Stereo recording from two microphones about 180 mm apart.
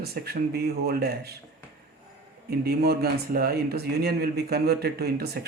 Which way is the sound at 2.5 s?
60° right (ahead or behind).